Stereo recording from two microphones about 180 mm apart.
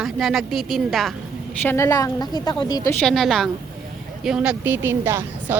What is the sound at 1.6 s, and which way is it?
A woman's voice, 15° left (ahead or behind).